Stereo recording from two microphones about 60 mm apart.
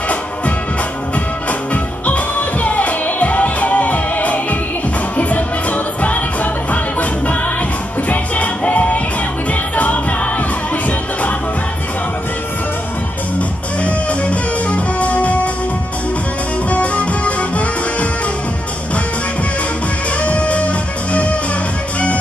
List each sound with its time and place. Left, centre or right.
1.7 s music: left
13.8 s music: left
16.7 s music: left
20.2 s music: left